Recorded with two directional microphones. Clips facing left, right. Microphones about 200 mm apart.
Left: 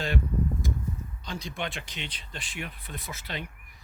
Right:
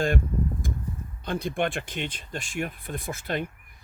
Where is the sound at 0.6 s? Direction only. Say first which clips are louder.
Left 1 dB; 50° right (ahead or behind).